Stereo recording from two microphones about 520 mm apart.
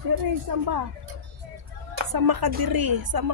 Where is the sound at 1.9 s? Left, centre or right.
Right.